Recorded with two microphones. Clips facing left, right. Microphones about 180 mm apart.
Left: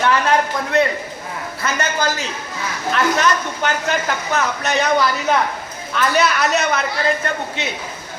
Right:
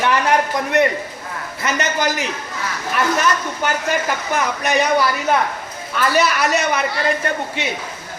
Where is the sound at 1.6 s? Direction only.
20° right (ahead or behind).